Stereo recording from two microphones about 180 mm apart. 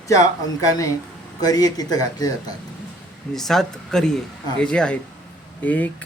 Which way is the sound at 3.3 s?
Centre (ahead or behind).